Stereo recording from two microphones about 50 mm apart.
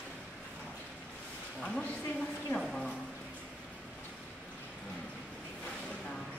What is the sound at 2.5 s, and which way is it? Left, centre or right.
Speech, centre.